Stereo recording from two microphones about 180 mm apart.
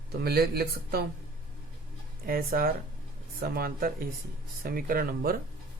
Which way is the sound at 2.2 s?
55° right (ahead or behind).